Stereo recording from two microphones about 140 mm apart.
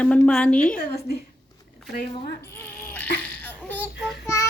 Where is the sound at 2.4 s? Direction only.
15° left (ahead or behind).